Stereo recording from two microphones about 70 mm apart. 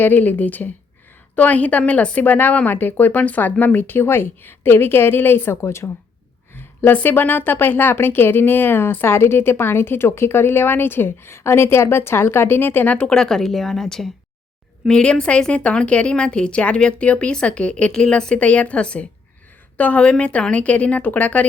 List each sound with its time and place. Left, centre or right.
0.0 s a woman's voice: left